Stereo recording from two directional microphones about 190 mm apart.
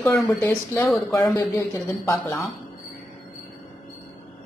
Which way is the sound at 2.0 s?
15° left (ahead or behind).